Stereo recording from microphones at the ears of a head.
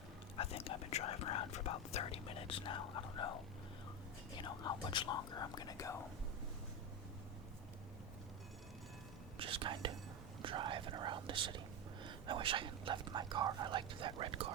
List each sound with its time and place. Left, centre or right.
0.3 s whispering: left
4.4 s speech: left
9.4 s speech: right